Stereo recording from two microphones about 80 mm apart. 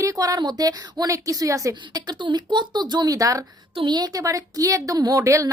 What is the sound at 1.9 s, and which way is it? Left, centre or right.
Speech, right.